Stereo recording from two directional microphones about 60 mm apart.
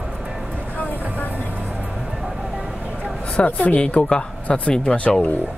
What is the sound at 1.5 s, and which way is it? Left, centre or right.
Music, right.